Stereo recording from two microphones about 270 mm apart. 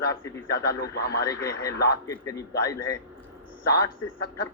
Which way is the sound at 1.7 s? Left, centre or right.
Left.